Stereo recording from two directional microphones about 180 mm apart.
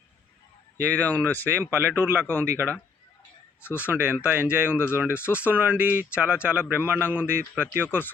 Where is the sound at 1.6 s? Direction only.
15° right (ahead or behind).